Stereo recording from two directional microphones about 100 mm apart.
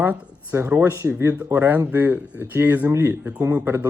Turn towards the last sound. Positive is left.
turn(degrees=-20)  # may be behind; listen again after turning